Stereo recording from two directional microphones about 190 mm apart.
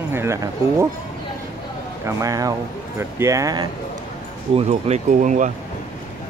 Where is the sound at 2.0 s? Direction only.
15° right (ahead or behind).